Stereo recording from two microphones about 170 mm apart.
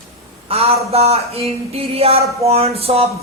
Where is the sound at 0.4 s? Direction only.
35° right (ahead or behind).